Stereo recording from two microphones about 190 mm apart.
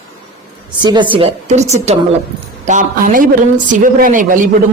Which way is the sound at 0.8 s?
25° right (ahead or behind).